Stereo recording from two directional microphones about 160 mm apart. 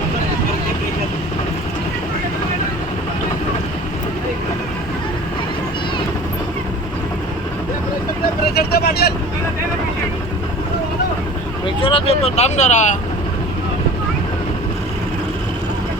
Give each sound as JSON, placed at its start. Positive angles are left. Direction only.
{"t": 8.5, "sound": "vehicle", "side_deg": 80}
{"t": 11.6, "sound": "speech", "side_deg": 35}